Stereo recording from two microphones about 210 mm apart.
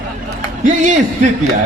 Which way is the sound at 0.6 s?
35° right (ahead or behind).